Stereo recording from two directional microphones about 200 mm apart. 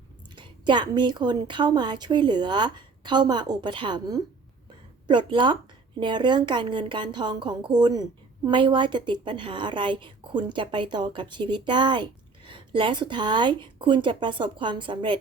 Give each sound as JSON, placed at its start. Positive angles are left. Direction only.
{"t": 0.3, "sound": "a woman's voice", "side_deg": -20}